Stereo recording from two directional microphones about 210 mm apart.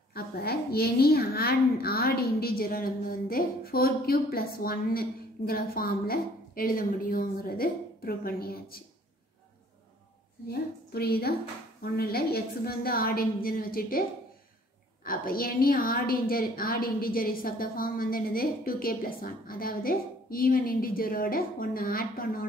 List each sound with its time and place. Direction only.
0.1 s a child's voice: 45° left (ahead or behind)
10.9 s a child's voice: 45° left (ahead or behind)
15.0 s a child's voice: 45° left (ahead or behind)